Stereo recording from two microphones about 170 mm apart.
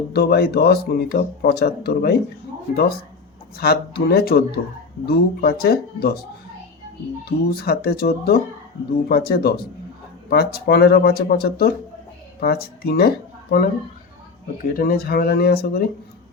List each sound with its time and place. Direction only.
0.1 s speech: 70° left (ahead or behind)
3.6 s speech: 65° left (ahead or behind)
7.3 s speech: 65° left (ahead or behind)
14.7 s speech: 60° left (ahead or behind)